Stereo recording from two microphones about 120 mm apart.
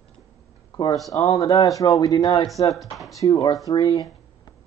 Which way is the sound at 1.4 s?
30° left (ahead or behind).